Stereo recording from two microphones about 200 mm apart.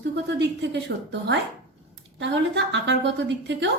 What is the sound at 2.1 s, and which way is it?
A woman's voice, 60° right (ahead or behind).